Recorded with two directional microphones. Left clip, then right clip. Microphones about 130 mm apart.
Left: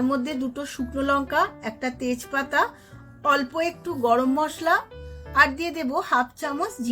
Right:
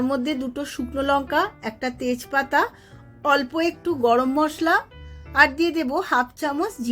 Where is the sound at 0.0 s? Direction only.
25° right (ahead or behind).